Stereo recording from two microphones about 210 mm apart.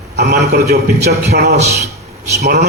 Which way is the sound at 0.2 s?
50° right (ahead or behind).